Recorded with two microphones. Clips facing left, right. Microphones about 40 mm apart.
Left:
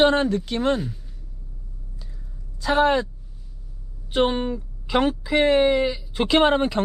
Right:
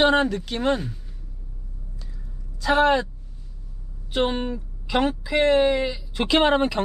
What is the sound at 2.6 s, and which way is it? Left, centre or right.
Speech, right.